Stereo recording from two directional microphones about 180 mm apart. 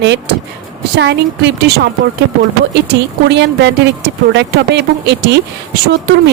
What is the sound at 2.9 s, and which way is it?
Speech, 70° right (ahead or behind).